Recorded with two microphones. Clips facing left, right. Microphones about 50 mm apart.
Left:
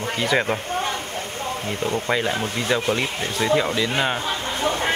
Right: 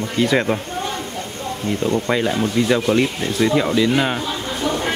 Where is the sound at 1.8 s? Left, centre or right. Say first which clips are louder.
Right 5 dB; left.